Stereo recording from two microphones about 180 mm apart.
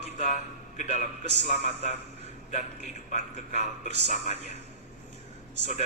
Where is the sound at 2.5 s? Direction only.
40° left (ahead or behind).